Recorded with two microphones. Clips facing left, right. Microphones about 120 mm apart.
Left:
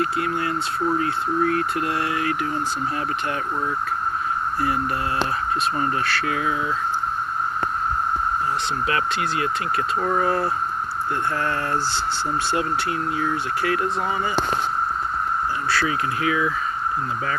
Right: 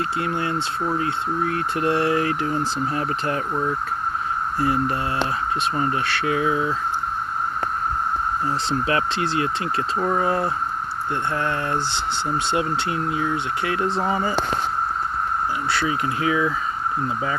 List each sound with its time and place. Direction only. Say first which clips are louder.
0.0 s speech: left 1 dB; 25° right (ahead or behind)
4.6 s speech: right 3 dB; 25° right (ahead or behind)
8.9 s speech: right 1 dB; 30° right (ahead or behind)
15.7 s speech: left 1 dB; 25° right (ahead or behind)